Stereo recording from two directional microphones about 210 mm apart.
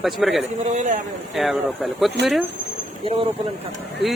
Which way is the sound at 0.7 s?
35° right (ahead or behind).